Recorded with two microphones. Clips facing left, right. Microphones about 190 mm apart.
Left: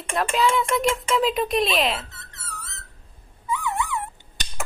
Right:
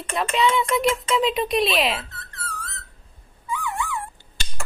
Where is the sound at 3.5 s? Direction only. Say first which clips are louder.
Left 2 dB; 20° left (ahead or behind).